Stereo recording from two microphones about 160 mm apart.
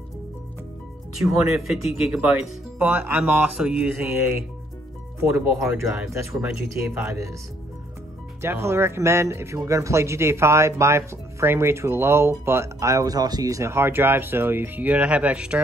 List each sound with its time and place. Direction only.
1.3 s speech: 5° right (ahead or behind)
8.4 s speech: 15° right (ahead or behind)